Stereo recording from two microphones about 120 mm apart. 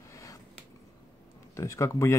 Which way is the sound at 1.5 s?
25° left (ahead or behind).